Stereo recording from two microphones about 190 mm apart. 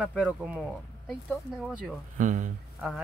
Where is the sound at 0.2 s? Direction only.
5° right (ahead or behind).